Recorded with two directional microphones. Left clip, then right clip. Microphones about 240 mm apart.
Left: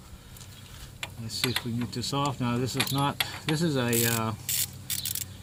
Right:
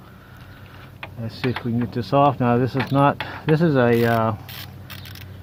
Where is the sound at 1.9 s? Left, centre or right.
Right.